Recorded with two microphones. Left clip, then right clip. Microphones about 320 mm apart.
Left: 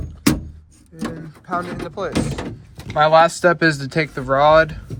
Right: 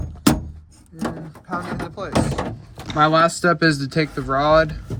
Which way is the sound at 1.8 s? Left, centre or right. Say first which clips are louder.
Even; centre.